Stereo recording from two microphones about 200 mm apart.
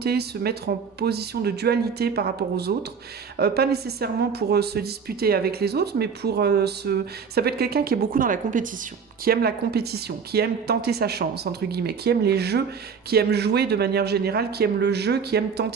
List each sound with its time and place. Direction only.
0.0 s speech: 50° right (ahead or behind)